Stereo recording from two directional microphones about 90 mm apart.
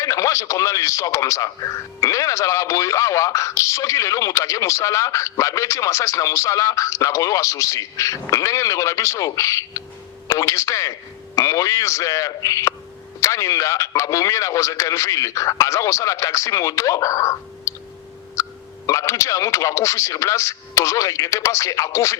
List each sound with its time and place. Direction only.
0.0 s speech: 35° left (ahead or behind)
18.4 s hiccup: 35° left (ahead or behind)
18.9 s speech: 35° left (ahead or behind)